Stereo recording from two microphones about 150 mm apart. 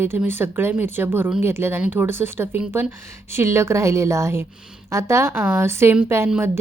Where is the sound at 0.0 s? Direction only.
15° right (ahead or behind).